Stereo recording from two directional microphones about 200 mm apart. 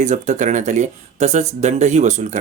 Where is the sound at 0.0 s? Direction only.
35° right (ahead or behind).